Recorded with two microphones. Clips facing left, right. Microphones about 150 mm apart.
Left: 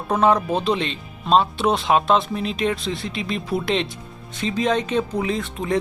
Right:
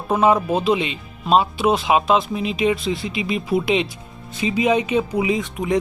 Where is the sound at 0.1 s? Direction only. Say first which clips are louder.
Right 1 dB; 5° right (ahead or behind).